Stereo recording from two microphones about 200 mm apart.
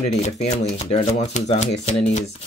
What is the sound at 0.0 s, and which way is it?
Speech, 35° left (ahead or behind).